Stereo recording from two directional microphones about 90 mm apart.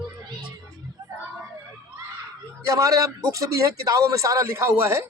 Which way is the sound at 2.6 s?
40° right (ahead or behind).